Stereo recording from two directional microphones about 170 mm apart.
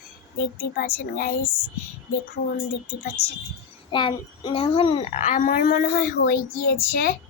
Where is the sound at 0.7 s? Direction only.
65° left (ahead or behind).